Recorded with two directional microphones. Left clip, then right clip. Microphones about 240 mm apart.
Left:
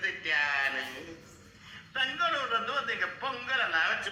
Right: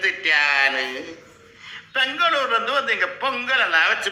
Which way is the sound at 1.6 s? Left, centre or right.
Right.